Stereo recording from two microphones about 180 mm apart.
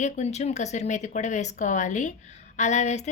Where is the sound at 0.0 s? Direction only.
40° left (ahead or behind).